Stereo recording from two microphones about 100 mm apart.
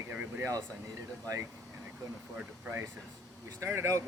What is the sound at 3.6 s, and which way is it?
Speech, 30° right (ahead or behind).